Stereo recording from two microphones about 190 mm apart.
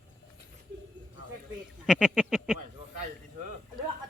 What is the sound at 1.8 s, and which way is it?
Speech, 5° right (ahead or behind).